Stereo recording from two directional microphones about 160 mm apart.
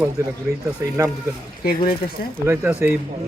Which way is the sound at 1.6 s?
70° left (ahead or behind).